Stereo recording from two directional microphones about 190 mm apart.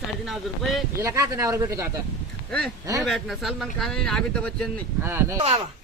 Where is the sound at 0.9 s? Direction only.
15° right (ahead or behind).